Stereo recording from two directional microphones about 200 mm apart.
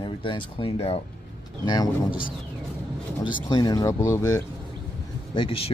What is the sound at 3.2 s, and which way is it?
Speech, 20° left (ahead or behind).